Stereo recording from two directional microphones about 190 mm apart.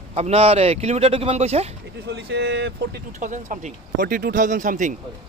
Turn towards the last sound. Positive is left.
turn(degrees=-45)  # may be behind; listen again after turning